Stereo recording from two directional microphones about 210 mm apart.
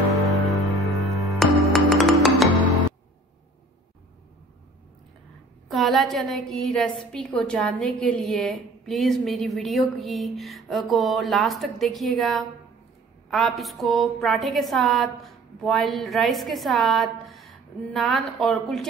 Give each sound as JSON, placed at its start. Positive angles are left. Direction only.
{"t": 0.3, "sound": "music", "side_deg": -15}
{"t": 1.2, "sound": "music", "side_deg": 0}
{"t": 5.7, "sound": "a woman's voice", "side_deg": 0}